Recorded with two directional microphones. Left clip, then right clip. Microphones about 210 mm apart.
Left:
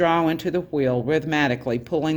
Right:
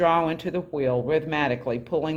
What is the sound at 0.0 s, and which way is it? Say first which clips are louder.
Speech: left 1 dB; 40° left (ahead or behind).